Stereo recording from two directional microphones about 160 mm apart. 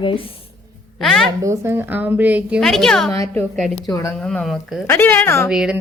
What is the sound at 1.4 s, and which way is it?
A woman's voice, 15° right (ahead or behind).